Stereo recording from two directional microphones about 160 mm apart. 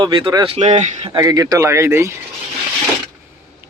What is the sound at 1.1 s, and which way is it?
Speech, 25° right (ahead or behind).